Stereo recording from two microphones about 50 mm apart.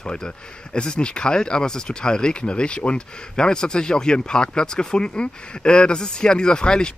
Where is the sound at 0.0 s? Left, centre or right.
Centre.